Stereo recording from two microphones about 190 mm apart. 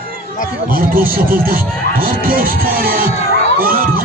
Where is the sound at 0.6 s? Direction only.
50° right (ahead or behind).